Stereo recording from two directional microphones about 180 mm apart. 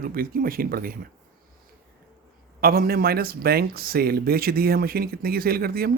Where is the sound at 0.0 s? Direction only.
55° right (ahead or behind).